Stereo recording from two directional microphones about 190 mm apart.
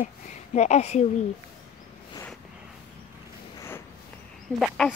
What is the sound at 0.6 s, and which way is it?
Speech, 35° left (ahead or behind).